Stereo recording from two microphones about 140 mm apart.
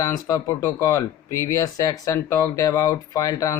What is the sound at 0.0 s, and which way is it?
Speech, 25° left (ahead or behind).